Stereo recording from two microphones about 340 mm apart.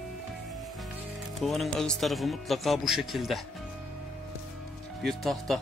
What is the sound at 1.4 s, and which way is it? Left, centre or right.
Speech, centre.